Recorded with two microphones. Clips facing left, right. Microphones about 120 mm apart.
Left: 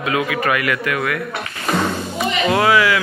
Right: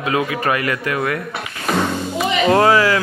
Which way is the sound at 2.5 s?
35° right (ahead or behind).